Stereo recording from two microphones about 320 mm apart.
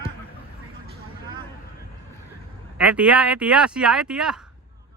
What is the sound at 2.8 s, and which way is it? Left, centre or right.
Speech, centre.